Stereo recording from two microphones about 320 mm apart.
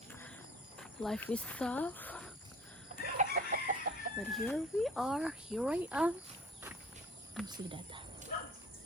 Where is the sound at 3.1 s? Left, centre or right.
Right.